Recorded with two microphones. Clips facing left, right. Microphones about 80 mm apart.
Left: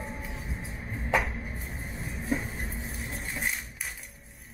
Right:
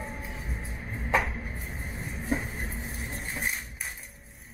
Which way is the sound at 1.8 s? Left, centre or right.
Right.